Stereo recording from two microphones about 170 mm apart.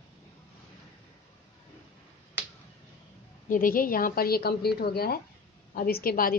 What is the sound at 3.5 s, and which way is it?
A woman's voice, 55° left (ahead or behind).